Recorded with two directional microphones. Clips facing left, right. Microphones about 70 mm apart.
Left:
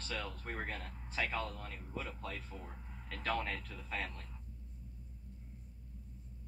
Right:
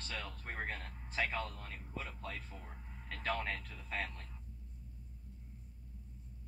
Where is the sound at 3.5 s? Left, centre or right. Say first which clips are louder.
Even; centre.